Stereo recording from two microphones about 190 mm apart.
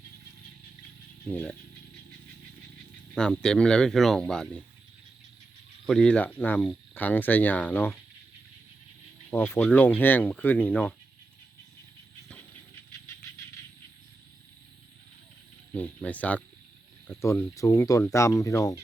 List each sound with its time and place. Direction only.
1.2 s speech: 10° left (ahead or behind)
3.2 s speech: 5° left (ahead or behind)
5.8 s speech: 5° left (ahead or behind)
9.3 s speech: 10° left (ahead or behind)
15.7 s a sound: 10° left (ahead or behind)
17.1 s speech: 15° left (ahead or behind)